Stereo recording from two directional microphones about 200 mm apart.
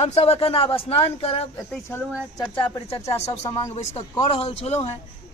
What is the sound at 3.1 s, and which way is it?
Speech, 30° left (ahead or behind).